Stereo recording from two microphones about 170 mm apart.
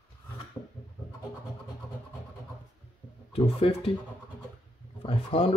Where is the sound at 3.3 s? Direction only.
35° left (ahead or behind).